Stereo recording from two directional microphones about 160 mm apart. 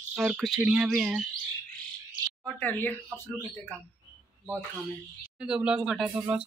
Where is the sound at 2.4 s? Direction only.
10° left (ahead or behind).